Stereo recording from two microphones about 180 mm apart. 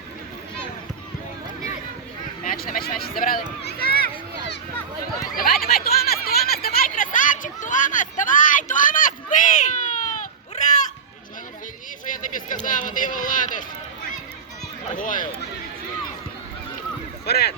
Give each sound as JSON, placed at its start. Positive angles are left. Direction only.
{"t": 2.4, "sound": "speech", "side_deg": 50}
{"t": 3.6, "sound": "a sound", "side_deg": 60}
{"t": 5.2, "sound": "a sound", "side_deg": 55}
{"t": 12.6, "sound": "speech", "side_deg": 45}
{"t": 14.9, "sound": "speech", "side_deg": 50}
{"t": 17.2, "sound": "speech", "side_deg": 60}